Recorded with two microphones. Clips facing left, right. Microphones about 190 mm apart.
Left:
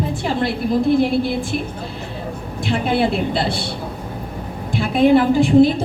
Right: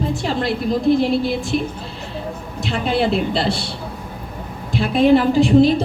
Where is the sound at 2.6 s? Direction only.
55° left (ahead or behind).